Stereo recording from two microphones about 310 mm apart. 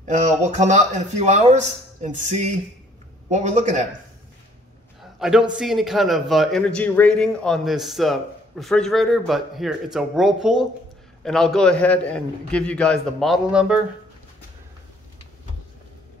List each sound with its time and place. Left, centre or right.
0.0 s speech: right
5.2 s a man's voice: centre